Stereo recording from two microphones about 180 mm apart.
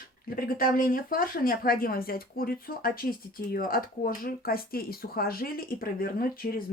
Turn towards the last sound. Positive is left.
turn(degrees=55)  # may be behind; listen again after turning